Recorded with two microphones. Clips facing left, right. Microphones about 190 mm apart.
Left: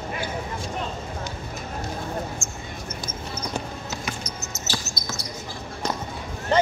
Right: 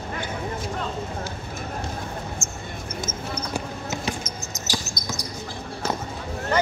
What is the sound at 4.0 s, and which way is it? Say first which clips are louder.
Basketball bounce: right 3 dB; 30° right (ahead or behind).